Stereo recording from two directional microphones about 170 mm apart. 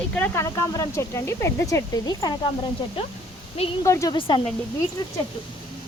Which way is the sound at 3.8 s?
20° left (ahead or behind).